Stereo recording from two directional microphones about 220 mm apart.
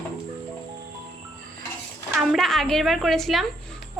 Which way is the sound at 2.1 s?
Centre (ahead or behind).